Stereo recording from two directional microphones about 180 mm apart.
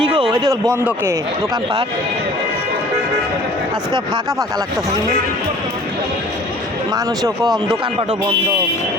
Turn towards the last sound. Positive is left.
turn(degrees=0)  # may be behind; listen again after turning